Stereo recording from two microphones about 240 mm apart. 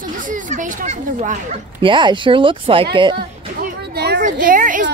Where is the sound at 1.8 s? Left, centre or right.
Centre.